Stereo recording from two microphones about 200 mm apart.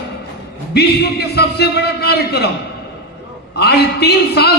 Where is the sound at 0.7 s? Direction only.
55° left (ahead or behind).